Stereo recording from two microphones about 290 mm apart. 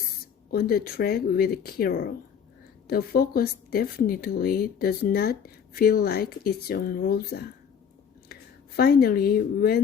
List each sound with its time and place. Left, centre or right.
0.5 s speech: left